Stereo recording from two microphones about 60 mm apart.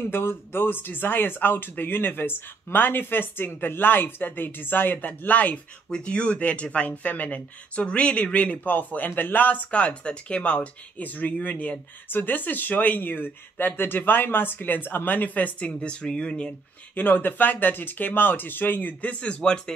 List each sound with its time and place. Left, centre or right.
0.1 s speech: left
5.9 s speech: centre
16.9 s speech: left; by 19.7 s centre